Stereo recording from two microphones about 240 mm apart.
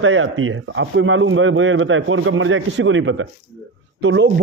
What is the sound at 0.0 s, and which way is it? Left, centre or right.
A man's voice, right.